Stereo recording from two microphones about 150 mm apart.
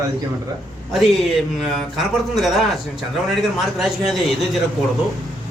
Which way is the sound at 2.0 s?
Centre (ahead or behind).